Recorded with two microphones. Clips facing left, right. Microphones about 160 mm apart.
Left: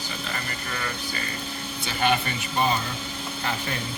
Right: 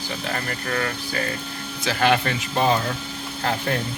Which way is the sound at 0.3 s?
55° right (ahead or behind).